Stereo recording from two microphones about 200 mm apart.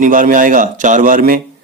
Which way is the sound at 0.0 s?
40° right (ahead or behind).